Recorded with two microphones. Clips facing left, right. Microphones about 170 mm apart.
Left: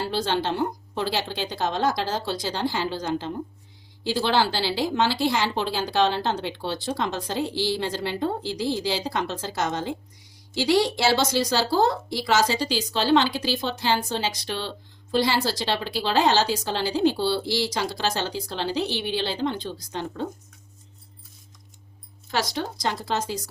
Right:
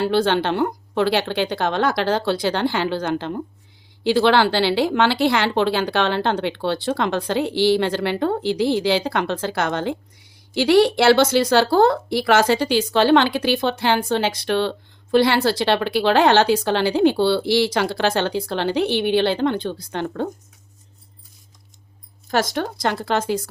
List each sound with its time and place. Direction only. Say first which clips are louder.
0.0 s a woman's voice: right 7 dB; 60° right (ahead or behind)
22.5 s a woman's voice: right 5 dB; 55° right (ahead or behind)